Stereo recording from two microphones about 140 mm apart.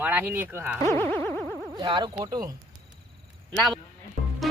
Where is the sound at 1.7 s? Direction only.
35° right (ahead or behind).